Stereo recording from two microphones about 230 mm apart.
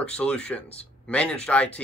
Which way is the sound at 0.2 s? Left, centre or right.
Centre.